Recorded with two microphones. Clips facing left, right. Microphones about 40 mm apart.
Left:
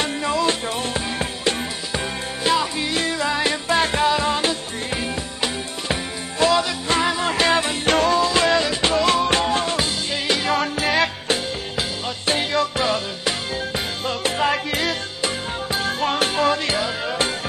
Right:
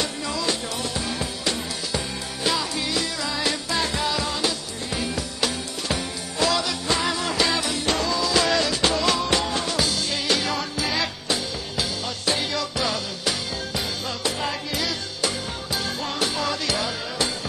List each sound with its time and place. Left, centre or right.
0.0 s music: left